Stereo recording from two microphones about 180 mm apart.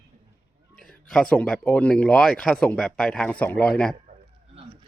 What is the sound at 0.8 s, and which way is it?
Speech, 5° left (ahead or behind).